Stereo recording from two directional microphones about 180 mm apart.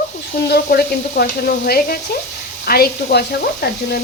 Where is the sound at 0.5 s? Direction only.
60° left (ahead or behind).